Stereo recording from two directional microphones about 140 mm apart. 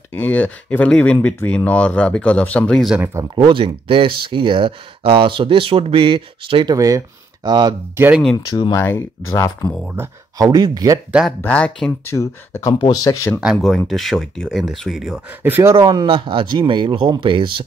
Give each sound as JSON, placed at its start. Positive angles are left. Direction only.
{"t": 0.1, "sound": "speech", "side_deg": 10}
{"t": 3.3, "sound": "speech", "side_deg": -40}
{"t": 8.5, "sound": "speech", "side_deg": 30}
{"t": 8.8, "sound": "speech", "side_deg": 15}
{"t": 9.9, "sound": "speech", "side_deg": -25}
{"t": 11.1, "sound": "speech", "side_deg": -5}
{"t": 11.4, "sound": "speech", "side_deg": 10}
{"t": 12.1, "sound": "speech", "side_deg": 20}
{"t": 13.4, "sound": "speech", "side_deg": 0}
{"t": 15.4, "sound": "speech", "side_deg": -15}